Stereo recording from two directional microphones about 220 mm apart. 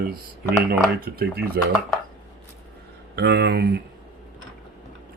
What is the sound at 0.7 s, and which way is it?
Speech, 45° right (ahead or behind).